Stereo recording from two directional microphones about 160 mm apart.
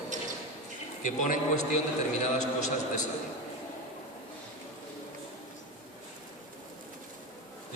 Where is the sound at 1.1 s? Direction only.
50° left (ahead or behind).